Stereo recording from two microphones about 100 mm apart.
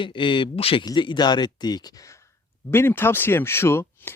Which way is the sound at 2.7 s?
25° left (ahead or behind).